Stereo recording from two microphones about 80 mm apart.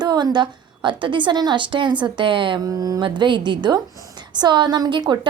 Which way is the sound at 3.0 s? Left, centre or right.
Right.